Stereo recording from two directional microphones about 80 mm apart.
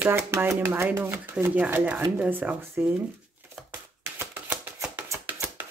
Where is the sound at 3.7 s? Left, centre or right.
Right.